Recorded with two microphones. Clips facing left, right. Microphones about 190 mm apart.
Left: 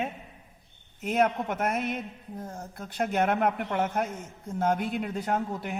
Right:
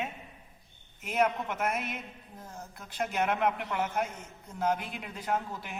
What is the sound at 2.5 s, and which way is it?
Speech, 35° left (ahead or behind).